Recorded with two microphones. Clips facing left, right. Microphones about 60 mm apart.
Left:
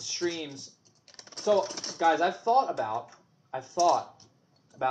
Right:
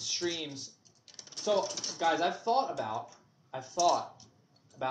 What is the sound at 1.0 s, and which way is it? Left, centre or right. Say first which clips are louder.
Typing: left 5 dB; left.